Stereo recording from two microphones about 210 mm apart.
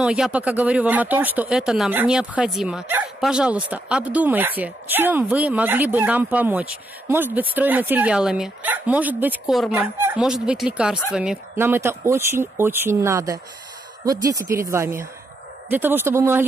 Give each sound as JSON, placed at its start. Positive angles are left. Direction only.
{"t": 0.0, "sound": "speech", "side_deg": -5}